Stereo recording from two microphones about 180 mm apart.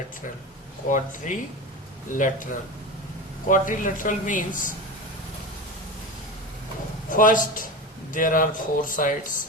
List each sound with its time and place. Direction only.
0.9 s speech: 45° left (ahead or behind)
7.1 s speech: 45° left (ahead or behind)